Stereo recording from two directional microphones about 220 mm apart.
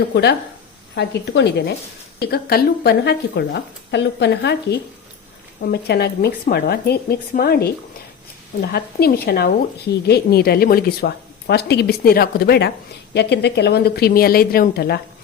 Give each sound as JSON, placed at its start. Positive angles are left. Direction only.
{"t": 0.1, "sound": "speech", "side_deg": 50}